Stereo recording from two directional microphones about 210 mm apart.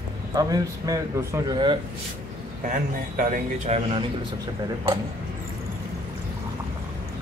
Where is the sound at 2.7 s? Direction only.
40° right (ahead or behind).